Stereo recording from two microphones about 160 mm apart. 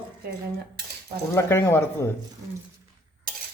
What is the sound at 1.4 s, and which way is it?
Speech, 15° left (ahead or behind).